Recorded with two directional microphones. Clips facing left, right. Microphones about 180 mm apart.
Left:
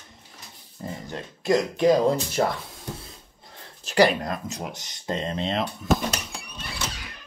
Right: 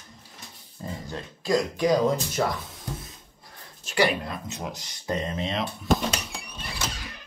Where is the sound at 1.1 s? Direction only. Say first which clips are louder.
Left 2 dB; 20° left (ahead or behind).